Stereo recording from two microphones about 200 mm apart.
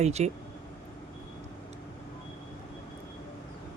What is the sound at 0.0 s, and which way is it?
Speech, 35° right (ahead or behind).